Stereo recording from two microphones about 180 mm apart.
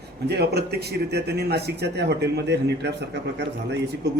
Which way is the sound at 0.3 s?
65° right (ahead or behind).